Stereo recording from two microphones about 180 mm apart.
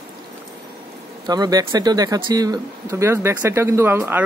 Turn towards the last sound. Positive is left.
turn(degrees=-15)  # may be behind; listen again after turning